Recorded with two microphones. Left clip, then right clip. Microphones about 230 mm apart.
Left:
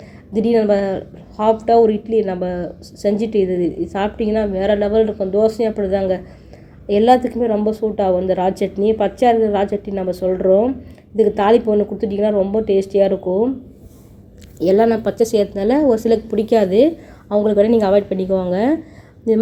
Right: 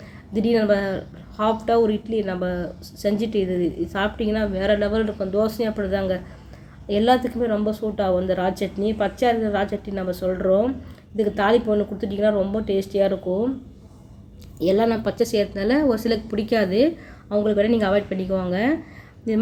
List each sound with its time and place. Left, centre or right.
0.3 s speech: centre
14.6 s a woman's voice: centre